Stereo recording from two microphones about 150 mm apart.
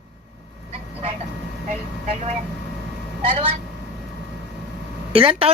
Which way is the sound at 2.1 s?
45° right (ahead or behind).